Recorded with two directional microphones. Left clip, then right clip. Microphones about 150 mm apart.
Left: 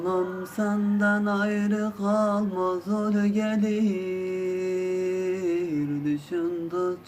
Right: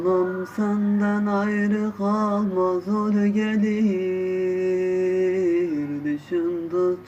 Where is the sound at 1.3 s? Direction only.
25° left (ahead or behind).